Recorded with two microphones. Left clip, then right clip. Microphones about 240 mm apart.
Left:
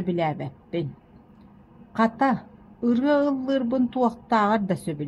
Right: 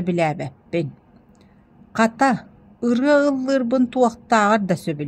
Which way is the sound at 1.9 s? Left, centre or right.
Right.